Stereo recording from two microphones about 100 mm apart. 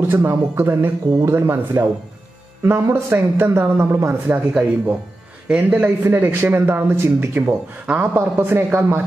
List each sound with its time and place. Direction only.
0.1 s a man's voice: 25° right (ahead or behind)